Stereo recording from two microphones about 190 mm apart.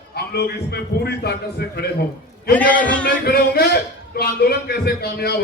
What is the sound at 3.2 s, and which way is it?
A man's voice, 55° left (ahead or behind).